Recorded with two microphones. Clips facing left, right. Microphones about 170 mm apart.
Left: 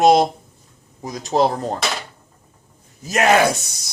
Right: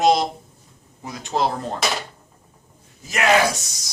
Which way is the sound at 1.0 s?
40° left (ahead or behind).